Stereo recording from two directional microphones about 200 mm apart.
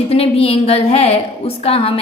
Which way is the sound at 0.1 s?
30° left (ahead or behind).